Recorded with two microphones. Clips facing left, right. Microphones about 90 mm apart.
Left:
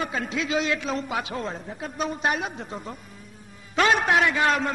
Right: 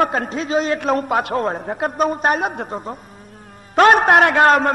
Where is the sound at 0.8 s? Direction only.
50° right (ahead or behind).